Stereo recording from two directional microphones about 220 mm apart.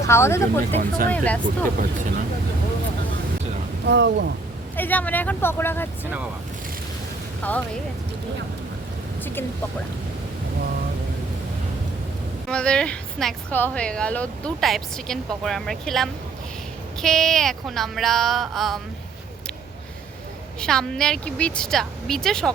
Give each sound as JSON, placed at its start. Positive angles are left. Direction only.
{"t": 0.1, "sound": "speech", "side_deg": 10}
{"t": 0.8, "sound": "speech", "side_deg": -40}
{"t": 1.1, "sound": "speech", "side_deg": 5}
{"t": 1.5, "sound": "speech", "side_deg": -40}
{"t": 3.8, "sound": "speech", "side_deg": -50}
{"t": 4.8, "sound": "speech", "side_deg": 5}
{"t": 7.4, "sound": "speech", "side_deg": 5}
{"t": 12.5, "sound": "speech", "side_deg": 5}
{"t": 20.6, "sound": "speech", "side_deg": 5}